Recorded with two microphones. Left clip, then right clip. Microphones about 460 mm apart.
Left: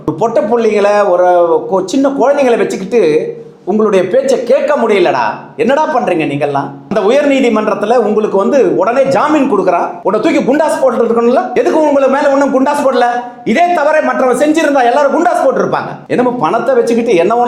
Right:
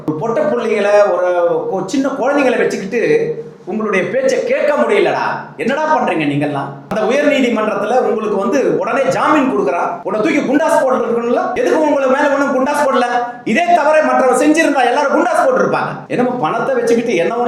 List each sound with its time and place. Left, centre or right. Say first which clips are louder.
0.2 s speech: left 5 dB; left
5.6 s speech: left 3 dB; left
11.2 s a man's voice: left 5 dB; left
16.1 s speech: left 5 dB; left